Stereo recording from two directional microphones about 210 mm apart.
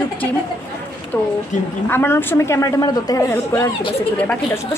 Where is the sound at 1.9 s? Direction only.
10° left (ahead or behind).